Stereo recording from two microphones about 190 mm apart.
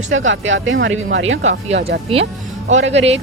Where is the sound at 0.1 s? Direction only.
85° right.